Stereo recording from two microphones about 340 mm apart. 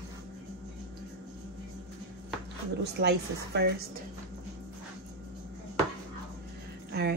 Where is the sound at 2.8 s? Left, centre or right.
Right.